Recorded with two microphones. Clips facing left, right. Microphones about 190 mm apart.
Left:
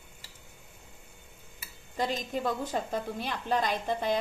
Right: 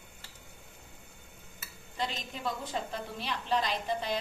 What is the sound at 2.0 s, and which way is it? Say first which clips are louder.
A woman's voice: left 6 dB; 45° left (ahead or behind).